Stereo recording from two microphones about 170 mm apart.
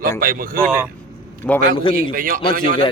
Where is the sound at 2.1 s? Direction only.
55° right (ahead or behind).